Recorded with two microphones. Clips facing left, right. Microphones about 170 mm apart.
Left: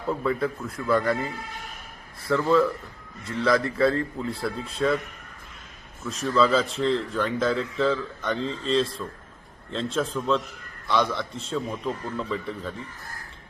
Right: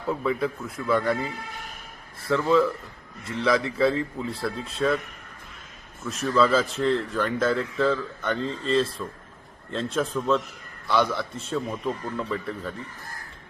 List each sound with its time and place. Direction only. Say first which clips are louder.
0.3 s speech: even; centre (ahead or behind)
2.3 s speech: even; centre (ahead or behind)
6.1 s speech: even; centre (ahead or behind)